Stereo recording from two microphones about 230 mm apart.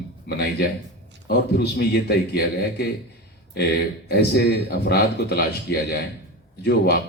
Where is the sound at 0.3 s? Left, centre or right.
Left.